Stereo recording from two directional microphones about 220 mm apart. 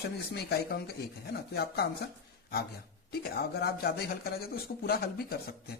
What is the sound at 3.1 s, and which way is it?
Speech, 45° left (ahead or behind).